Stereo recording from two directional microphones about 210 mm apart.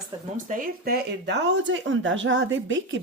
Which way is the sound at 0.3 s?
40° right (ahead or behind).